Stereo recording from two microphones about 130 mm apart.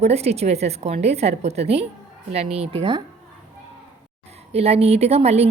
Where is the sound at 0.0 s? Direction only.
55° right (ahead or behind).